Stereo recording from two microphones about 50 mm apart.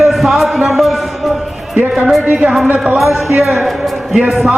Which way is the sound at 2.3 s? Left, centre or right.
Right.